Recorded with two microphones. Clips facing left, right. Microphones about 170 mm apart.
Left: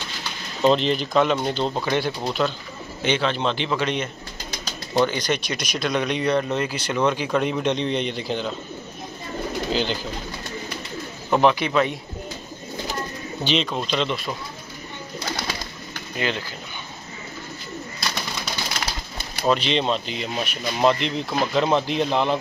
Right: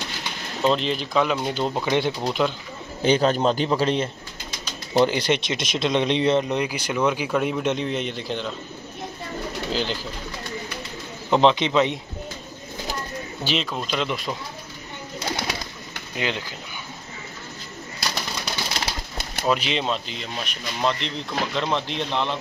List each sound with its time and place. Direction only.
0.7 s speech: centre (ahead or behind); by 2.5 s 15° right (ahead or behind)
3.0 s a man's voice: 40° right (ahead or behind); by 8.5 s centre (ahead or behind)
9.7 s speech: centre (ahead or behind)
11.2 s speech: 20° right (ahead or behind)
13.4 s speech: 5° right (ahead or behind)
16.2 s speech: 15° right (ahead or behind)
19.4 s speech: 5° right (ahead or behind)